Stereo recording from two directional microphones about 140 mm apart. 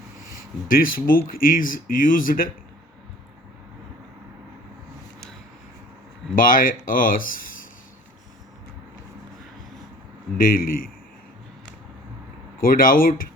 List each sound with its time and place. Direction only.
0.7 s speech: 90° left
6.3 s speech: 85° left
10.3 s speech: 85° left
12.5 s speech: 90° left